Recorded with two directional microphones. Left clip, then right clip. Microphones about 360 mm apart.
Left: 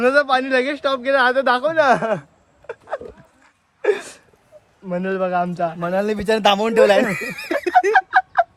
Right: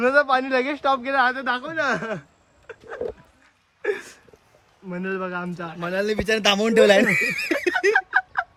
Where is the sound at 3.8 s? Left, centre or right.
Centre.